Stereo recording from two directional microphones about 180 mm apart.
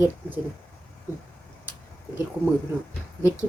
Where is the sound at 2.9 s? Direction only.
15° left (ahead or behind).